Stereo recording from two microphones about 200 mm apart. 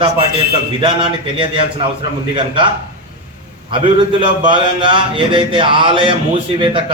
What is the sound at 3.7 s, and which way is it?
A man's voice, 25° right (ahead or behind).